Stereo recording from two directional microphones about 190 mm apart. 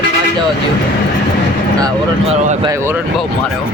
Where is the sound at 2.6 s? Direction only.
15° right (ahead or behind).